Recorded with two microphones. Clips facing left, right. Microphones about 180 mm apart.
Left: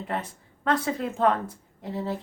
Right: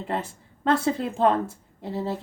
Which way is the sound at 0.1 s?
25° right (ahead or behind).